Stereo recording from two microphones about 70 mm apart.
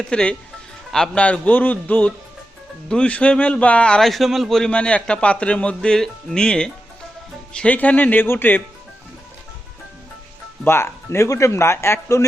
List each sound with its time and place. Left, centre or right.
0.0 s speech: centre
4.0 s a man's voice: centre
4.7 s speech: centre
10.6 s speech: left